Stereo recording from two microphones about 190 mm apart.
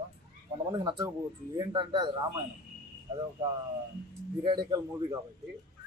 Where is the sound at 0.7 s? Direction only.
25° right (ahead or behind).